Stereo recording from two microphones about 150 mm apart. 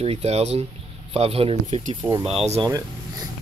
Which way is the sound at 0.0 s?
45° right (ahead or behind).